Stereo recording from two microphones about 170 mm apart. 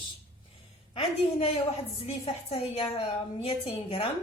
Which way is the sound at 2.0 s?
35° left (ahead or behind).